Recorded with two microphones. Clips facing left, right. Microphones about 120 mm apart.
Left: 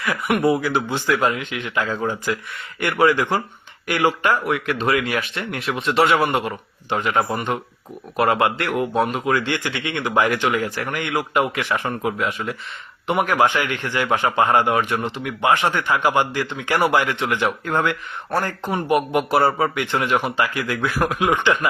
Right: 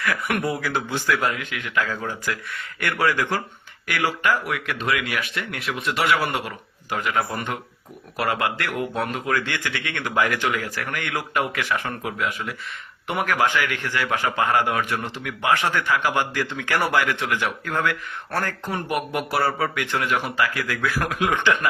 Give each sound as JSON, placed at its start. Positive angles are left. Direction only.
{"t": 0.0, "sound": "a man's voice", "side_deg": 15}